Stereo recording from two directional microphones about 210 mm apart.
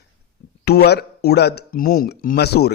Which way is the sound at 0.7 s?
50° left (ahead or behind).